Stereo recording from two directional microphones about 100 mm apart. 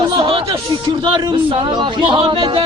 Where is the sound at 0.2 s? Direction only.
65° right (ahead or behind).